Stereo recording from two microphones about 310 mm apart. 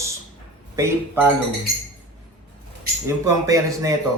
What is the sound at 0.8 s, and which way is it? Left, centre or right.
Speech, centre.